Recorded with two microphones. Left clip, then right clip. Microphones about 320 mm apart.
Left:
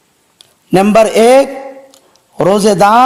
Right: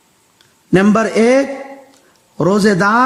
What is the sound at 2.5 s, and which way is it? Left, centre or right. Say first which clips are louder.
Speech: left 3 dB; centre.